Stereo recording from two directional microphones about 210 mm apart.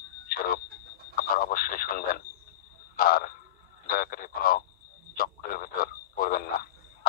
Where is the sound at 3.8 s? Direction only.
45° left (ahead or behind).